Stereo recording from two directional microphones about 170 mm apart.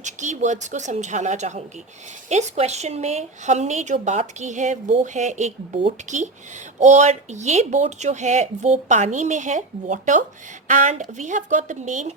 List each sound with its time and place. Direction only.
0.0 s speech: 45° right (ahead or behind)